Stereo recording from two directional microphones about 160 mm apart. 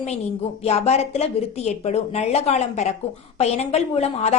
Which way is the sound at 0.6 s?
40° left (ahead or behind).